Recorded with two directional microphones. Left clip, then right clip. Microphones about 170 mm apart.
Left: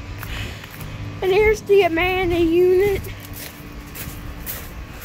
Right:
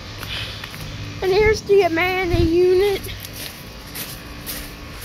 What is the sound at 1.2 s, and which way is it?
Speech, 20° left (ahead or behind).